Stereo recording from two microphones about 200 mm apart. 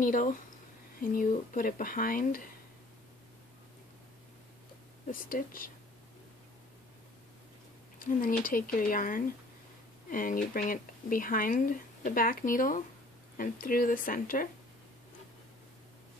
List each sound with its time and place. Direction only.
0.0 s speech: 40° left (ahead or behind)
5.3 s speech: 45° left (ahead or behind)
8.0 s speech: 45° left (ahead or behind)